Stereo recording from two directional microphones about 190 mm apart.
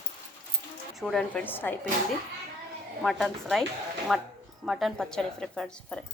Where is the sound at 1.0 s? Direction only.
Centre (ahead or behind).